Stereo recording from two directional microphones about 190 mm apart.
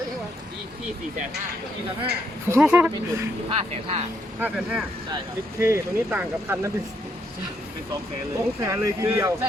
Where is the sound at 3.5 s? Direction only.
35° right (ahead or behind).